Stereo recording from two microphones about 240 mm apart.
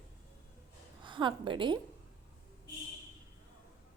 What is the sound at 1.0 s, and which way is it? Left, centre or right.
Speech, centre.